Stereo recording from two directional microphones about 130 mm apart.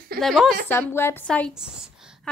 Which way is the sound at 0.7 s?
20° left (ahead or behind).